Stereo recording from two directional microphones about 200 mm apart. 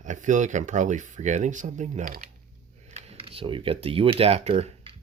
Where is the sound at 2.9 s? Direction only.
30° right (ahead or behind).